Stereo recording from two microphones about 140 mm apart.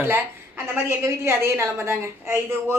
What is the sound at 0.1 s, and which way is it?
A woman's voice, 15° right (ahead or behind).